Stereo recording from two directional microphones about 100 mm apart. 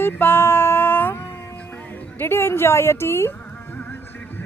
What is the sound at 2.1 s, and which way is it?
A woman's voice, 25° left (ahead or behind).